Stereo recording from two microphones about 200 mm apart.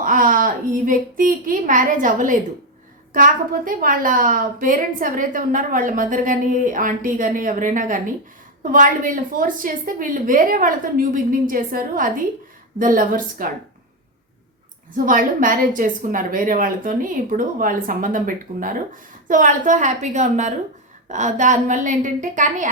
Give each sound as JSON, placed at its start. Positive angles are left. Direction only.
{"t": 0.0, "sound": "a woman's voice", "side_deg": -40}
{"t": 14.9, "sound": "a woman's voice", "side_deg": -45}